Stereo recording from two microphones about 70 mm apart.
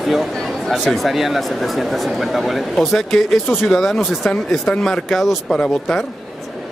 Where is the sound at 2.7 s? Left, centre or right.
Centre.